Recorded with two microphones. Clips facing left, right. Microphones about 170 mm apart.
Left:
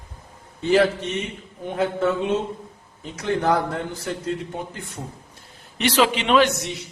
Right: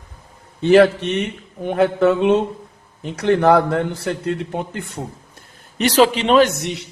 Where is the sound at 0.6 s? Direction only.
65° right (ahead or behind).